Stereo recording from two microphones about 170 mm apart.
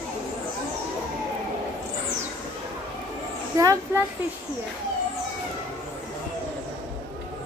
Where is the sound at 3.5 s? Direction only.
20° right (ahead or behind).